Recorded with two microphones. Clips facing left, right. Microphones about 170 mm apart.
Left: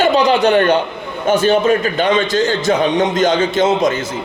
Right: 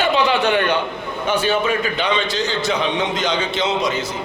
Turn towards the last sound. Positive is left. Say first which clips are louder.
# left 7 dB
turn(degrees=50)  # may be behind; listen again after turning